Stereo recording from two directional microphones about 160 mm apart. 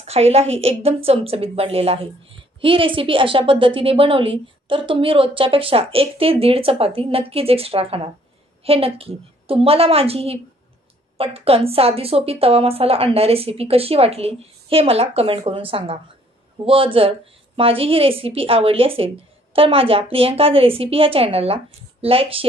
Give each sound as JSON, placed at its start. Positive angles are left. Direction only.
{"t": 0.0, "sound": "a woman's voice", "side_deg": -40}